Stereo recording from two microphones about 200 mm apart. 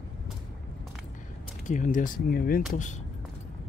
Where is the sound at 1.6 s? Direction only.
40° left (ahead or behind).